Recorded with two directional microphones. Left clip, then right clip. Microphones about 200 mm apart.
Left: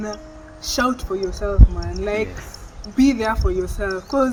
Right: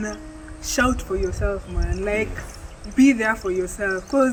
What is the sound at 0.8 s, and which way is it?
Speech, 10° right (ahead or behind).